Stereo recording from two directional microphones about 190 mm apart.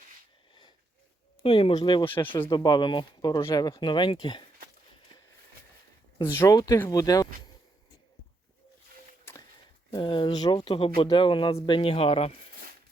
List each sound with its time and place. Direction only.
1.4 s speech: 30° left (ahead or behind)
2.0 s speech: 10° left (ahead or behind)
2.5 s speech: 25° left (ahead or behind)
6.3 s speech: 15° left (ahead or behind)
9.3 s a sound: 10° left (ahead or behind)
9.9 s speech: 25° left (ahead or behind)